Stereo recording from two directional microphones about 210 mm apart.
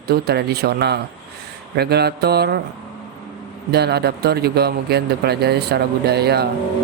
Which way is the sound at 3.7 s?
50° right (ahead or behind).